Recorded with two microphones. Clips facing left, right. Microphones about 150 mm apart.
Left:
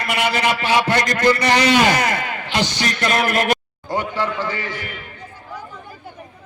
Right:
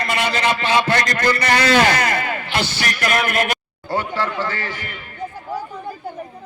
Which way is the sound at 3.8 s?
15° left (ahead or behind).